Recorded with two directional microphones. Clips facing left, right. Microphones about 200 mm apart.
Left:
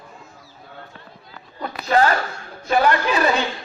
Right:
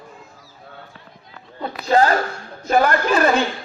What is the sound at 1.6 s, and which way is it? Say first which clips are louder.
Speech: right 2 dB; 30° right (ahead or behind).